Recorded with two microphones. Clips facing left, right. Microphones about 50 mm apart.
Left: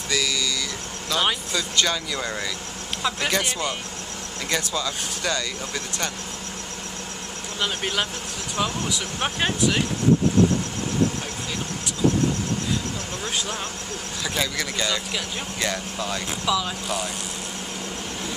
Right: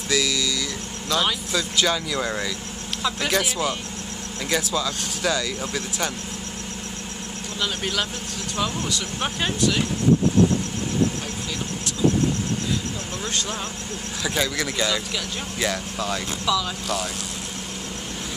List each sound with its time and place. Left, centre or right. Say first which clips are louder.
0.1 s speech: right 2 dB; centre
3.0 s speech: even; centre
3.3 s speech: right 4 dB; centre
7.6 s speech: left 1 dB; centre
14.2 s speech: right 2 dB; centre